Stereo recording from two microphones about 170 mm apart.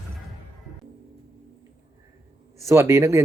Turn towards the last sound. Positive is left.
turn(degrees=-15)  # may be behind; listen again after turning